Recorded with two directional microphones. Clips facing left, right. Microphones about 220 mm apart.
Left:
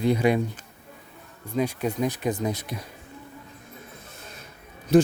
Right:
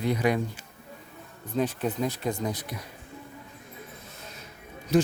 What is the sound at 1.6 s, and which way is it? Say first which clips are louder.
Speech: left 2 dB; 10° left (ahead or behind).